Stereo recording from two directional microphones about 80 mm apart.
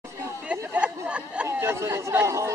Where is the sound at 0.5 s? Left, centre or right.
Centre.